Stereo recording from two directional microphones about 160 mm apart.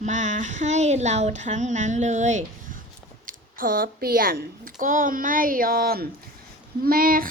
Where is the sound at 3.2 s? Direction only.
60° right (ahead or behind).